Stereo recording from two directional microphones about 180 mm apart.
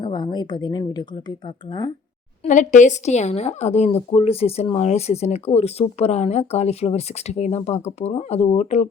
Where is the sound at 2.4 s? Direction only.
45° left (ahead or behind).